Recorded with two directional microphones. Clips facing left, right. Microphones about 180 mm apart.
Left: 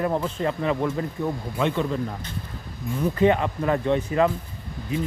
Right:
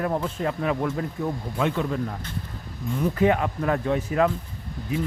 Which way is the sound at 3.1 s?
5° right (ahead or behind).